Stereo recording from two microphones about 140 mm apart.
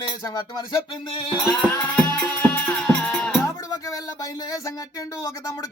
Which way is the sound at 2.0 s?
20° left (ahead or behind).